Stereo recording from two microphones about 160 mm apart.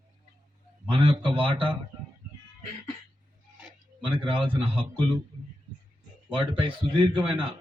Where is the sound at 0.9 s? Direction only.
30° right (ahead or behind).